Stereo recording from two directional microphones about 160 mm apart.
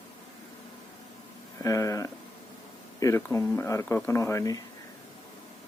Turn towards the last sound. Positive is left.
turn(degrees=20)  # may be behind; listen again after turning